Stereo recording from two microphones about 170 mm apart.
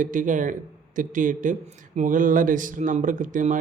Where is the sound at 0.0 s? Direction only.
50° right (ahead or behind).